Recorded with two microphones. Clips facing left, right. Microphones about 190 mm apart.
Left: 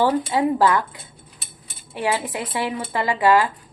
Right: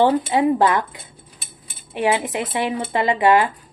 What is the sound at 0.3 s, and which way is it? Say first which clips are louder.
Speech: right 2 dB; 20° right (ahead or behind).